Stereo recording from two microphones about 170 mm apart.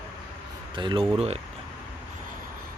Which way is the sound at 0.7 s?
30° right (ahead or behind).